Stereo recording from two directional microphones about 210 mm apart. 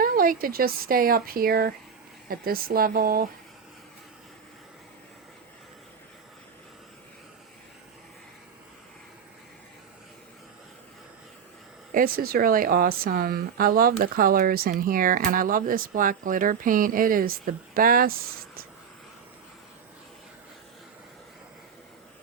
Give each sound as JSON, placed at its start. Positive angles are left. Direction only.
{"t": 0.0, "sound": "speech", "side_deg": -45}
{"t": 11.9, "sound": "speech", "side_deg": -40}